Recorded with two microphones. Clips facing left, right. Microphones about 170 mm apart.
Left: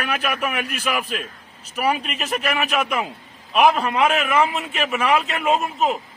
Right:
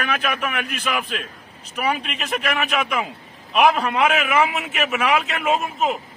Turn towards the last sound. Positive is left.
turn(degrees=0)  # may be behind; listen again after turning